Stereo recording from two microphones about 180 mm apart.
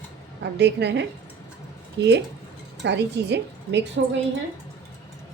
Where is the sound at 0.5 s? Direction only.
70° right (ahead or behind).